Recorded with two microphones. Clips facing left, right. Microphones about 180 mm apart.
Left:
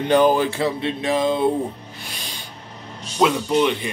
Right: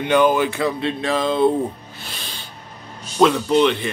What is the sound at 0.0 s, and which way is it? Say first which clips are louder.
Speech: even; 35° left (ahead or behind).